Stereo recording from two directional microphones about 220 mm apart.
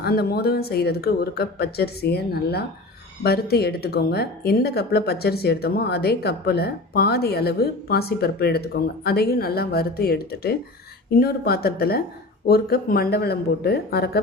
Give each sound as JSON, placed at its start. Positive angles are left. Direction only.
{"t": 0.0, "sound": "speech", "side_deg": 45}